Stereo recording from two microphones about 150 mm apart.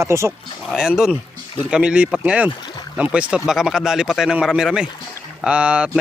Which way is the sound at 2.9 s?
5° right (ahead or behind).